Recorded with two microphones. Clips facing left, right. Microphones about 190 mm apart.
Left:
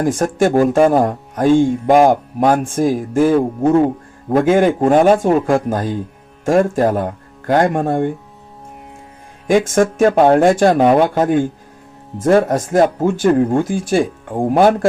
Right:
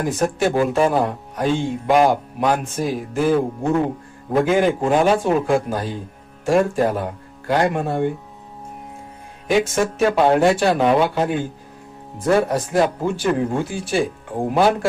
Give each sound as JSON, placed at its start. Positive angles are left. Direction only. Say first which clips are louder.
{"t": 0.0, "sound": "speech", "louder": "left 5 dB", "side_deg": 45}
{"t": 4.3, "sound": "speech", "louder": "left 4 dB", "side_deg": 50}
{"t": 9.5, "sound": "speech", "louder": "left 5 dB", "side_deg": 50}